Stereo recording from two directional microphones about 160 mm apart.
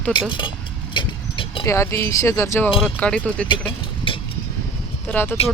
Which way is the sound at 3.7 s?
35° left (ahead or behind).